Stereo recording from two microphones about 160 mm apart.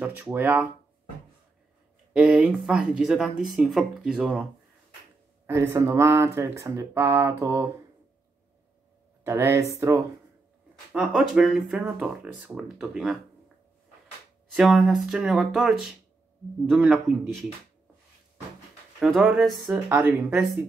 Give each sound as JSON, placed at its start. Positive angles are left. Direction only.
{"t": 0.0, "sound": "speech", "side_deg": -15}
{"t": 2.1, "sound": "speech", "side_deg": -5}
{"t": 5.5, "sound": "speech", "side_deg": -20}
{"t": 9.2, "sound": "speech", "side_deg": -15}
{"t": 10.9, "sound": "speech", "side_deg": 0}
{"t": 14.5, "sound": "speech", "side_deg": 0}
{"t": 18.9, "sound": "speech", "side_deg": 0}
{"t": 19.7, "sound": "speech", "side_deg": -15}